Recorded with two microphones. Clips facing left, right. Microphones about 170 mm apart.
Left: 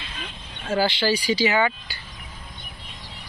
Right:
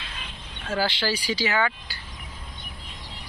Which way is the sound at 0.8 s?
Centre (ahead or behind).